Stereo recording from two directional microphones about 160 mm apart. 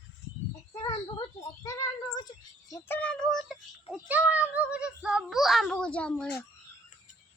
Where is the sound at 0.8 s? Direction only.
25° left (ahead or behind).